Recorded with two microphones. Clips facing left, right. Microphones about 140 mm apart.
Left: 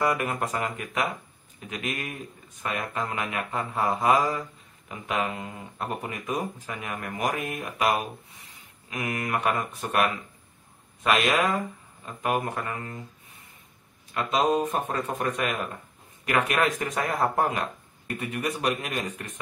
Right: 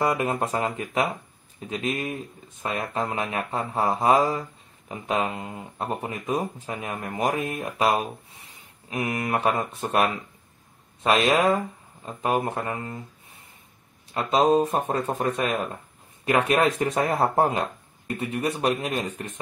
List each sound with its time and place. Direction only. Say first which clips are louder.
0.0 s speech: right 2 dB; 25° right (ahead or behind)
14.1 s speech: right 4 dB; 30° right (ahead or behind)